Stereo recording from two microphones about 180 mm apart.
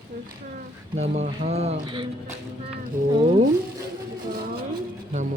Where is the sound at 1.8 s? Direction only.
25° right (ahead or behind).